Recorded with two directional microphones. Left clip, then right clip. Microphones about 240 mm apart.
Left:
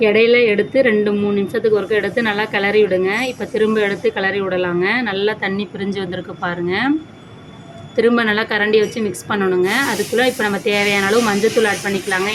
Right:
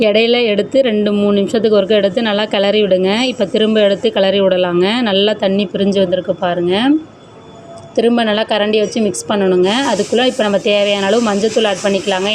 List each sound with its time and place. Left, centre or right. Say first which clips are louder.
0.0 s a woman's voice: right 1 dB; right
7.9 s a woman's voice: right 2 dB; centre